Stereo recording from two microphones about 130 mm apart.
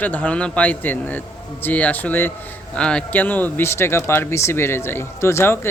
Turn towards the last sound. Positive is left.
turn(degrees=20)  # may be behind; listen again after turning